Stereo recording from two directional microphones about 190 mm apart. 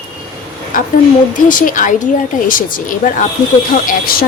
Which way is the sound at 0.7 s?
45° left (ahead or behind).